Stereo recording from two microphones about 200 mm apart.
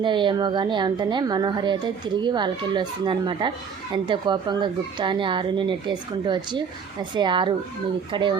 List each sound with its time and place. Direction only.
0.0 s a woman's voice: 25° right (ahead or behind)